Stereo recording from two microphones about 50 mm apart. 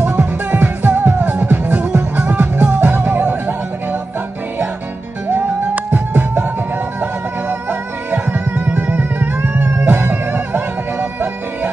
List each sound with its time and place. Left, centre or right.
0.0 s music: right
5.3 s music: right
8.1 s music: right